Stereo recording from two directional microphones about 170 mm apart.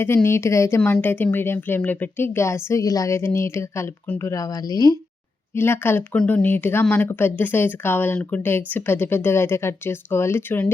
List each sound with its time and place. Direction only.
0.0 s speech: 15° left (ahead or behind)